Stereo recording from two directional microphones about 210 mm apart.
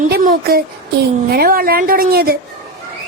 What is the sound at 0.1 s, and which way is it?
Speech, 40° right (ahead or behind).